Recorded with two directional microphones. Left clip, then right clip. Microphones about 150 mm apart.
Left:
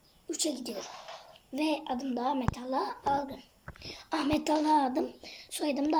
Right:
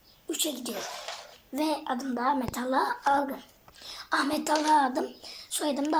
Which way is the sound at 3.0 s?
Centre (ahead or behind).